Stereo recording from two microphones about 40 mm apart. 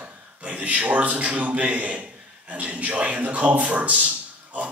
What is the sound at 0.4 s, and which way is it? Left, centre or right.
A man's voice, right.